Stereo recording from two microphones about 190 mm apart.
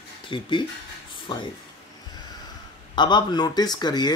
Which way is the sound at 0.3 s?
25° left (ahead or behind).